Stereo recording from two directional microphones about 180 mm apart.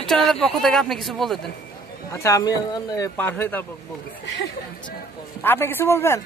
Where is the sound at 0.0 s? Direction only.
Centre (ahead or behind).